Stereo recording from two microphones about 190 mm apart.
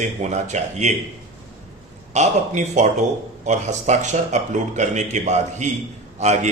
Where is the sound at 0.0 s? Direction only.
40° right (ahead or behind).